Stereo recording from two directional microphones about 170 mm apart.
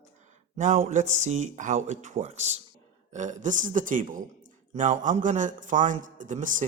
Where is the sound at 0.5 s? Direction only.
40° right (ahead or behind).